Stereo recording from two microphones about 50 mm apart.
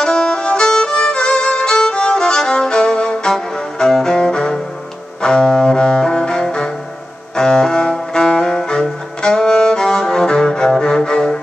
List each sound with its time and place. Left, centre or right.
0.0 s violin: centre
3.3 s music: centre
5.2 s cello: centre
7.3 s music: centre